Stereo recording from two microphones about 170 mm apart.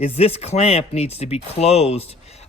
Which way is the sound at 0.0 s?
35° left (ahead or behind).